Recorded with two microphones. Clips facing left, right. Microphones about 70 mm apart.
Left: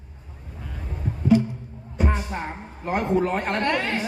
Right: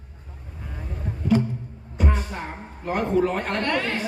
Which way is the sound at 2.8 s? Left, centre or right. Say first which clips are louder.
Right 1 dB; left.